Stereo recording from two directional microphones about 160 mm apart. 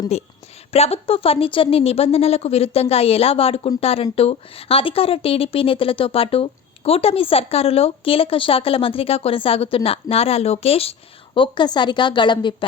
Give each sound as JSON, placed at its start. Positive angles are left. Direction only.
{"t": 0.1, "sound": "a woman's voice", "side_deg": 40}